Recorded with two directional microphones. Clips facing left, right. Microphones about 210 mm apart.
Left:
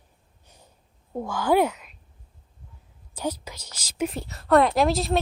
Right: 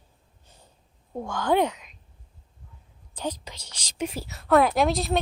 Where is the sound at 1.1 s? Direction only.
5° left (ahead or behind).